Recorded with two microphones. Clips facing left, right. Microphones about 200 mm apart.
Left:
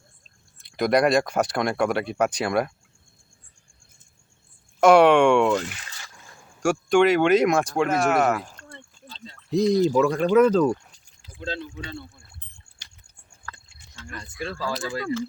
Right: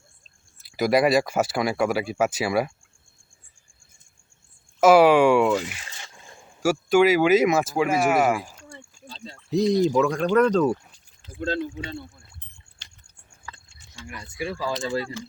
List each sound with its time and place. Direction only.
0.6 s speech: 5° right (ahead or behind)
4.8 s speech: 5° right (ahead or behind)
6.0 s a sound: 25° right (ahead or behind)
6.6 s speech: 5° right (ahead or behind)
9.1 s a sound: 30° right (ahead or behind)
9.5 s speech: centre (ahead or behind)
11.3 s speech: 50° right (ahead or behind)
13.5 s a sound: 10° right (ahead or behind)
13.9 s speech: 10° right (ahead or behind)